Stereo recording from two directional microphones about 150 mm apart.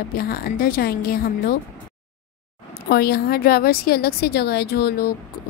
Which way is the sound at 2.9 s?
90° left.